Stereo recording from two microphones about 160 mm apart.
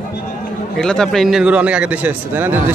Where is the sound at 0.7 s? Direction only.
5° left (ahead or behind).